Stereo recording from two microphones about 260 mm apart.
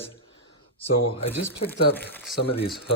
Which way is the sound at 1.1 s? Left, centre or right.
Left.